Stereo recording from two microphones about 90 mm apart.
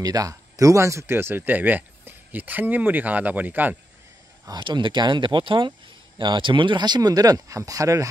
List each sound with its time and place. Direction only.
0.0 s speech: 40° right (ahead or behind); by 3.7 s 20° right (ahead or behind)
4.5 s speech: 60° right (ahead or behind); by 8.1 s 40° right (ahead or behind)